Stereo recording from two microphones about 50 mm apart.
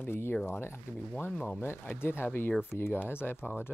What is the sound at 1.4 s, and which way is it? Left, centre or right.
Speech, left.